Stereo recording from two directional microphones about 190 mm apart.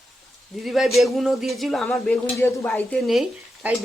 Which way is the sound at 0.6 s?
Centre (ahead or behind).